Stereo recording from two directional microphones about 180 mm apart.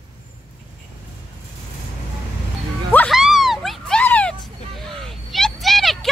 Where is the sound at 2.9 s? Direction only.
Centre (ahead or behind).